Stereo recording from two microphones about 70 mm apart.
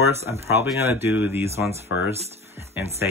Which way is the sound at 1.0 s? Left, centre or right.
Right.